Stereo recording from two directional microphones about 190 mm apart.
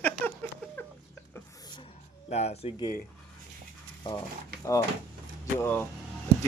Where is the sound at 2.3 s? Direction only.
35° left (ahead or behind).